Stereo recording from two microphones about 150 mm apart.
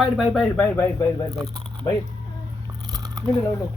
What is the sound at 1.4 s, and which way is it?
Speech, 25° right (ahead or behind).